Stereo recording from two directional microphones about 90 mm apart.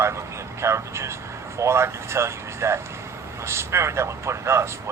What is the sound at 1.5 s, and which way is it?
A man's voice, 30° right (ahead or behind).